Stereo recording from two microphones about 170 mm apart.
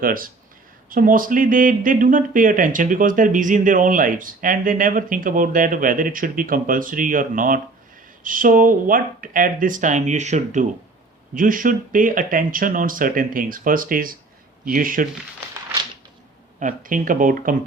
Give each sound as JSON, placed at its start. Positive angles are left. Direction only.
{"t": 0.0, "sound": "speech", "side_deg": -55}
{"t": 16.6, "sound": "speech", "side_deg": -50}